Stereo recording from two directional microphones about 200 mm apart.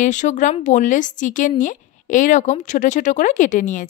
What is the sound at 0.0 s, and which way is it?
A woman's voice, 40° left (ahead or behind).